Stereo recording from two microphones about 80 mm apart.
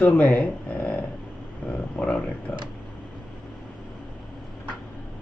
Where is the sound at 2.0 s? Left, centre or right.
Centre.